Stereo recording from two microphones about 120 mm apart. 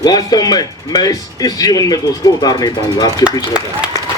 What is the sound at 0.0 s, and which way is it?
A man's voice, 35° left (ahead or behind).